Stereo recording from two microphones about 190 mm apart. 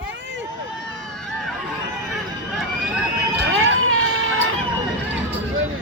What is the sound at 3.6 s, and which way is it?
Run, 90° right.